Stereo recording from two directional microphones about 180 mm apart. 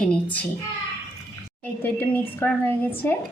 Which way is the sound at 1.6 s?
10° left (ahead or behind).